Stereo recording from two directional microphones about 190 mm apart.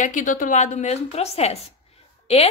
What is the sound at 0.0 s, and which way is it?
A woman's voice, 45° left (ahead or behind).